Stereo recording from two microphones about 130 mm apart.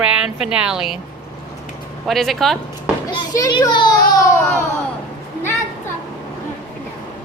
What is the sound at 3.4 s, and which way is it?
Speech, 30° left (ahead or behind).